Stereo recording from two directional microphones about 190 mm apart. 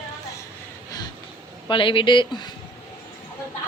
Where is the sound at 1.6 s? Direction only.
25° left (ahead or behind).